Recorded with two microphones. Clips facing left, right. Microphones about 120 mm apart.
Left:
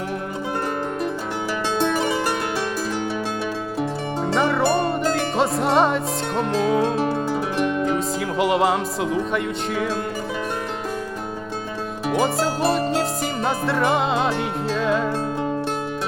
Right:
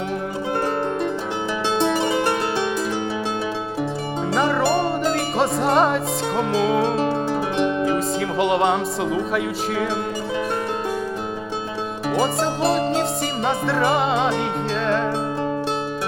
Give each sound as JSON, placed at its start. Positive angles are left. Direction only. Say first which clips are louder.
{"t": 1.8, "sound": "music", "louder": "right 1 dB", "side_deg": -20}
{"t": 4.3, "sound": "music", "louder": "even", "side_deg": 0}
{"t": 7.5, "sound": "music", "louder": "right 2 dB", "side_deg": -20}
{"t": 7.9, "sound": "music", "louder": "right 1 dB", "side_deg": 0}
{"t": 12.1, "sound": "music", "louder": "even", "side_deg": 0}